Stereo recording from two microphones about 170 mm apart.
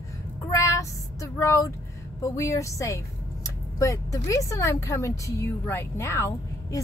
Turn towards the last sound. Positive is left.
turn(degrees=15)  # may be behind; listen again after turning